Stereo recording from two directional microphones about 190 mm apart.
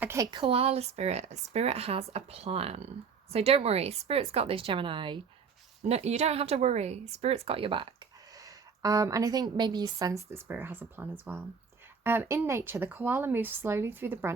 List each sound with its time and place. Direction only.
0.0 s speech: 15° right (ahead or behind)